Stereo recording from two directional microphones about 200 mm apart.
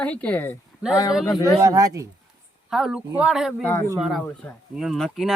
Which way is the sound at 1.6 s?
15° right (ahead or behind).